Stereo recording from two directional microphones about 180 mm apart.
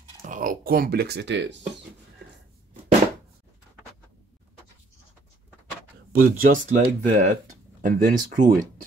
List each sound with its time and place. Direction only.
0.2 s speech: 50° right (ahead or behind); by 1.6 s 80° right
6.2 s speech: 50° right (ahead or behind)